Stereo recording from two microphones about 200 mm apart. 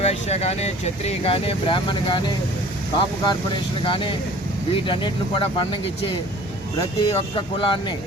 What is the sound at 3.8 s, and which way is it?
Speech, 25° left (ahead or behind).